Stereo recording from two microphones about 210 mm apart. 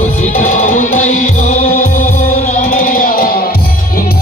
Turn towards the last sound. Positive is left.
turn(degrees=40)  # may be behind; listen again after turning